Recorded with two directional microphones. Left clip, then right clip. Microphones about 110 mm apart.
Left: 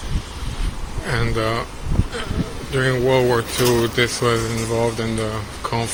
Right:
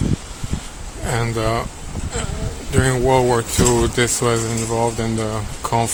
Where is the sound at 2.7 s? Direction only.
50° right (ahead or behind).